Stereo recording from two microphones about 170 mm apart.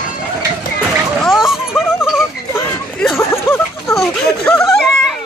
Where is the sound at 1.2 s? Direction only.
Centre (ahead or behind).